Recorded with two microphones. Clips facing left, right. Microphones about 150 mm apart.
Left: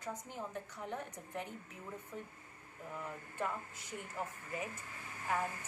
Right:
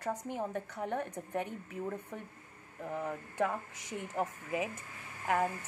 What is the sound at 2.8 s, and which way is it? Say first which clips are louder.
Speech: right 8 dB; 70° right (ahead or behind).